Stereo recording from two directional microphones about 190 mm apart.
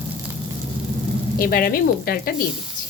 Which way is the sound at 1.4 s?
50° left (ahead or behind).